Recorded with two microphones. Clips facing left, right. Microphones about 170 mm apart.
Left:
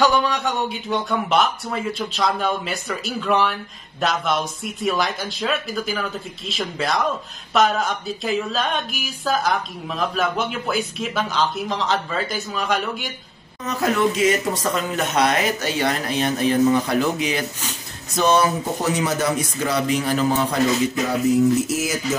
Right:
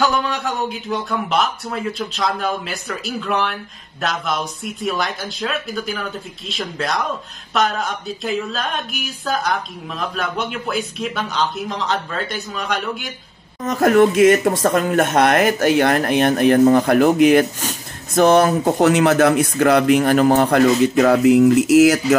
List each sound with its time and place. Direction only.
0.0 s speech: centre (ahead or behind)
13.6 s speech: 50° right (ahead or behind); by 22.0 s 75° right (ahead or behind)